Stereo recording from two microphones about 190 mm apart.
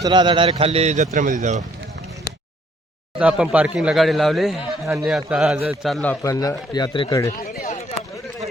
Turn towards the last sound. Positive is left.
turn(degrees=50)  # may be behind; listen again after turning